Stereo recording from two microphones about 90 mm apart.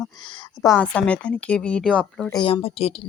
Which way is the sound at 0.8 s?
10° left (ahead or behind).